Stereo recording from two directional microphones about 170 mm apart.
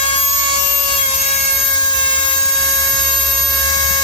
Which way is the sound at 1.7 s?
25° left (ahead or behind).